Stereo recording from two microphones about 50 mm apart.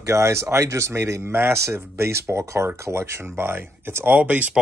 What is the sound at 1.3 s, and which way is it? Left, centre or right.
Speech, right.